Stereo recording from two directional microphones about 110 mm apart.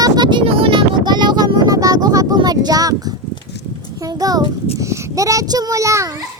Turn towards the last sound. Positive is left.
turn(degrees=-30)  # may be behind; listen again after turning